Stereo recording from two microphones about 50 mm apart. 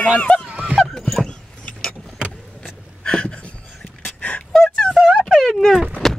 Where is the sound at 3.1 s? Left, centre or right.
Centre.